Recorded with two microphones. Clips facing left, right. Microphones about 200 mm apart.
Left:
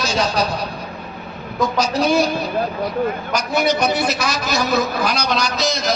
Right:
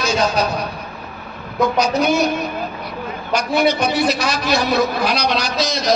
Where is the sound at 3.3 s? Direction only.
45° left (ahead or behind).